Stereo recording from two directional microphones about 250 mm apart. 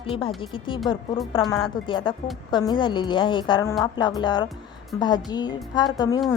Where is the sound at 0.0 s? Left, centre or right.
Left.